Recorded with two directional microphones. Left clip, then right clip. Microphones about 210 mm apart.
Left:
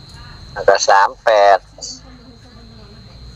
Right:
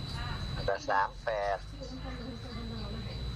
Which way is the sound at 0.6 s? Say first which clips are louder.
Left 19 dB; 55° left (ahead or behind).